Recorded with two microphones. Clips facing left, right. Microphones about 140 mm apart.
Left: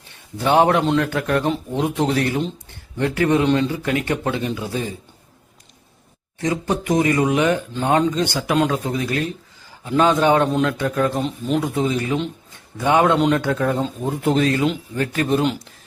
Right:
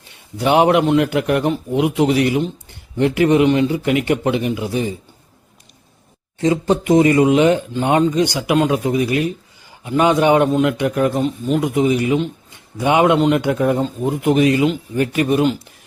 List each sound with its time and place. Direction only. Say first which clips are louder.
0.3 s speech: right 2 dB; 15° right (ahead or behind)
6.4 s speech: right 6 dB; 25° right (ahead or behind)
11.1 s speech: right 3 dB; centre (ahead or behind)
11.6 s speech: right 5 dB; 15° right (ahead or behind)